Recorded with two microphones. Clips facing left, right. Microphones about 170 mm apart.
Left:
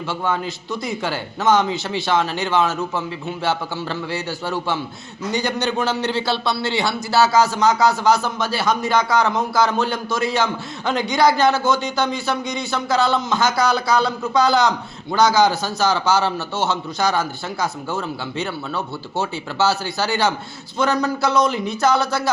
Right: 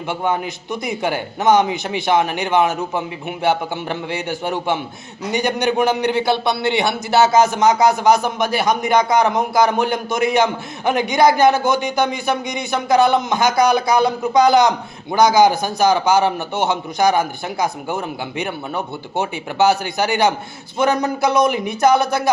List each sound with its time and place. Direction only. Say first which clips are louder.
0.1 s a man's voice: right 3 dB; 20° right (ahead or behind)